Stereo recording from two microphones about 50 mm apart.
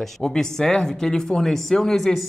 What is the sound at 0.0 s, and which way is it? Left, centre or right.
Speech, centre.